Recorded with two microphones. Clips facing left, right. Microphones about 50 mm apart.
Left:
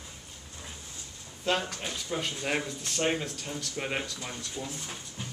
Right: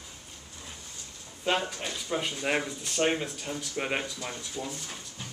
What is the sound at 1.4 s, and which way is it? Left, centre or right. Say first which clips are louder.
Speech: right 1 dB; centre.